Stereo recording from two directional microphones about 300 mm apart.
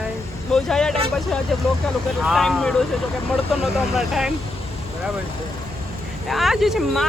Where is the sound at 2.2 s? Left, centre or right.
Centre.